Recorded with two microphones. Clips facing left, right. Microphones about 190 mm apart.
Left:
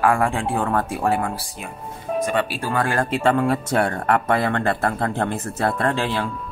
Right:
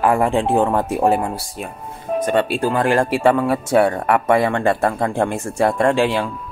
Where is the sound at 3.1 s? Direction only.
10° right (ahead or behind).